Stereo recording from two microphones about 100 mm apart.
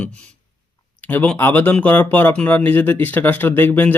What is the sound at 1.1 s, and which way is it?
Speech, 15° left (ahead or behind).